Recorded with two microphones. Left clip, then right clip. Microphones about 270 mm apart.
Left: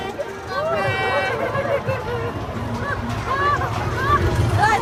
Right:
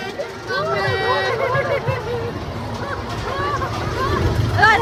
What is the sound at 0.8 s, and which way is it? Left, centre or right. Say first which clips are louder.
Run: right 1 dB; right.